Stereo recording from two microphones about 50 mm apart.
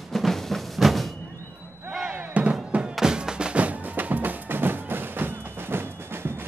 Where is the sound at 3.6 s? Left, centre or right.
Right.